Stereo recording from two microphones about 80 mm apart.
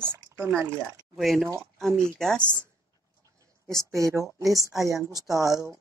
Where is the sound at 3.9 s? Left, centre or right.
Right.